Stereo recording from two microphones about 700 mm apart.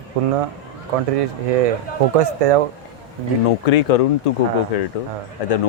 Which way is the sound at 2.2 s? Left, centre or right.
Right.